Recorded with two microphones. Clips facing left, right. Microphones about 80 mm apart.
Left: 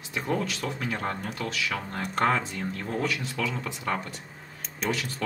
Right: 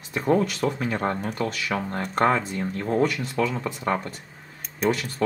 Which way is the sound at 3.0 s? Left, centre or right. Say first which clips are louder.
Right 6 dB; right.